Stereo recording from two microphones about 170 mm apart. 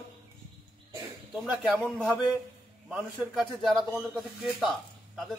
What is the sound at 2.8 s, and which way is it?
A man's voice, 5° right (ahead or behind).